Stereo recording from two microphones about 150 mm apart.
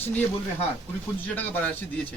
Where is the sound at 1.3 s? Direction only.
10° left (ahead or behind).